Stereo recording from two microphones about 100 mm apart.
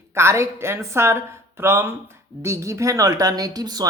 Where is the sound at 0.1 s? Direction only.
25° right (ahead or behind).